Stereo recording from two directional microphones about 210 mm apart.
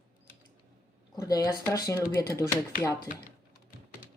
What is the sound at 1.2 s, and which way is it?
Speech, 15° left (ahead or behind).